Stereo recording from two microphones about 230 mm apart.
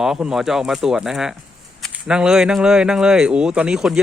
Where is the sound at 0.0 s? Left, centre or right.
Centre.